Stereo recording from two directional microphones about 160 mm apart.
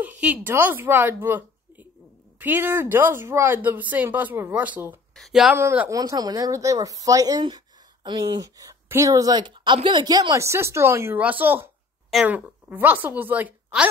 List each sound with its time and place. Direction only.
0.0 s a woman's voice: 10° right (ahead or behind)
5.6 s a woman's voice: 15° right (ahead or behind)